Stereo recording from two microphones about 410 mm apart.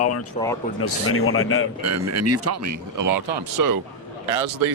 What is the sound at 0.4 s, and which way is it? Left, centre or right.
Speech, centre.